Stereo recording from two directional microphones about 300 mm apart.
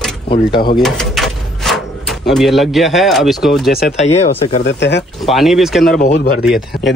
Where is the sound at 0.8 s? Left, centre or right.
Centre.